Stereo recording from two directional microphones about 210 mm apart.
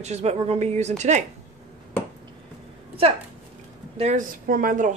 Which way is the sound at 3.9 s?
35° right (ahead or behind).